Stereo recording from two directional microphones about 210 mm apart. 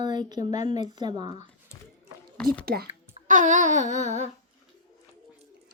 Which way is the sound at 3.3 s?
35° right (ahead or behind).